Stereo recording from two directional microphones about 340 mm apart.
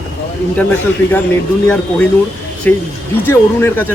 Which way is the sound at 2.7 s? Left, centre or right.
Centre.